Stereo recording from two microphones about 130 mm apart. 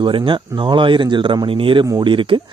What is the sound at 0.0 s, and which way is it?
Speech, 40° right (ahead or behind).